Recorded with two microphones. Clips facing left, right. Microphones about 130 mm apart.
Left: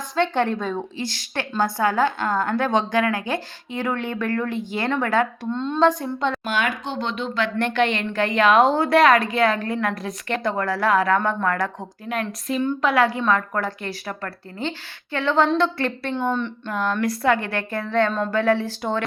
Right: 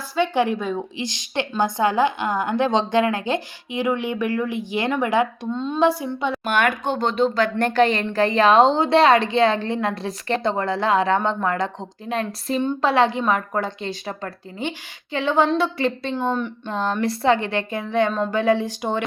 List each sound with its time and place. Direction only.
0.2 s a woman's voice: 10° right (ahead or behind)
6.4 s a woman's voice: 55° right (ahead or behind); by 16.1 s 15° right (ahead or behind)
16.6 s a woman's voice: 30° right (ahead or behind)